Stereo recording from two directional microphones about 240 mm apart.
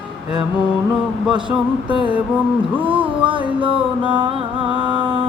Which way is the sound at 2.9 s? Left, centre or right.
Right.